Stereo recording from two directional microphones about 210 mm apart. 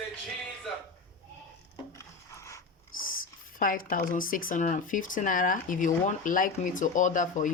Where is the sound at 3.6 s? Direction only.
40° left (ahead or behind).